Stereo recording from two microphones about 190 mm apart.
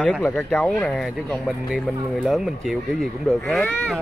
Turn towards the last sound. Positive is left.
turn(degrees=5)  # may be behind; listen again after turning